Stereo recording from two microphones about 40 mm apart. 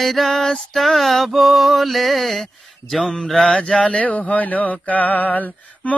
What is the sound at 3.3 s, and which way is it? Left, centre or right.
Mantra, left.